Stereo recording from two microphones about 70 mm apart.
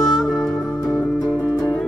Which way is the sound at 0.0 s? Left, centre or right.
Centre.